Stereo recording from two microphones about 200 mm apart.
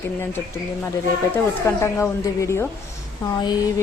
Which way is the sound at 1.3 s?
15° left (ahead or behind).